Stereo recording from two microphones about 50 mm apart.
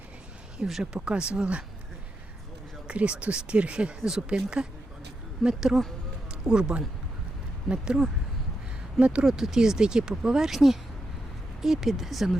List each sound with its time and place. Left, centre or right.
0.6 s speech: centre
0.9 s speech: right
2.8 s speech: right
5.4 s speech: centre
9.2 s speech: centre